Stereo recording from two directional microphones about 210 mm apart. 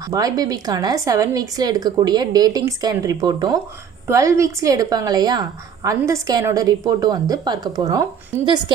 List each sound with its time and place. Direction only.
0.1 s a woman's voice: 15° right (ahead or behind)